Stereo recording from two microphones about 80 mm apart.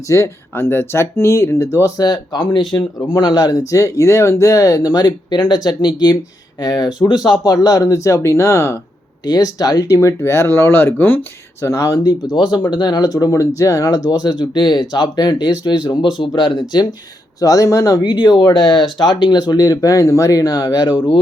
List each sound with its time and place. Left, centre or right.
0.1 s speech: left
3.1 s speech: left
9.2 s speech: left
11.6 s speech: left
12.4 s speech: left
17.4 s speech: left
18.0 s speech: left
20.7 s speech: left